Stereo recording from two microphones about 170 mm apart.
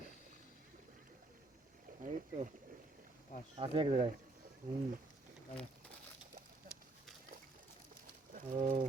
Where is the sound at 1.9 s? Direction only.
50° right (ahead or behind).